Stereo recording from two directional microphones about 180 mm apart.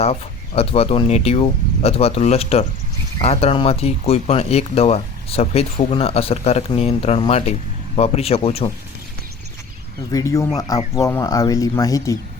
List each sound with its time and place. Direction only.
0.0 s speech: 35° left (ahead or behind)
10.1 s speech: 20° left (ahead or behind)